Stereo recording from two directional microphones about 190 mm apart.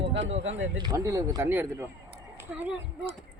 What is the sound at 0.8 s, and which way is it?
Speech, 20° right (ahead or behind).